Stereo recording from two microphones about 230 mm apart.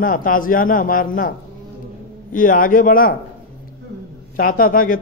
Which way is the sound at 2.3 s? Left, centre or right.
Left.